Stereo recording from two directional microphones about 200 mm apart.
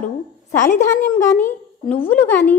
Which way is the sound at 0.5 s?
40° left (ahead or behind).